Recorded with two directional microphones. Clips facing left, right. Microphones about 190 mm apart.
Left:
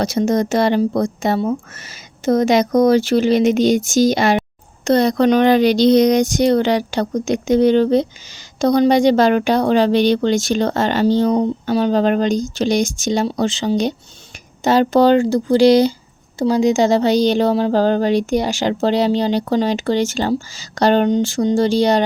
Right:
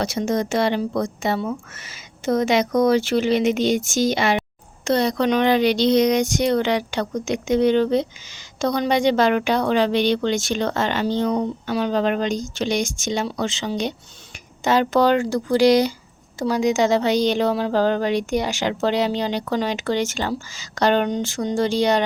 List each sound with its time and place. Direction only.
0.0 s speech: 40° left (ahead or behind)